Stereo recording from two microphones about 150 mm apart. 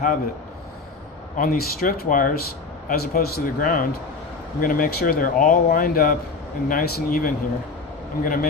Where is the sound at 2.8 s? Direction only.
80° left.